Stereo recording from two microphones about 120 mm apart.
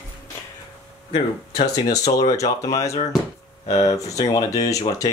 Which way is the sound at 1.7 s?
30° left (ahead or behind).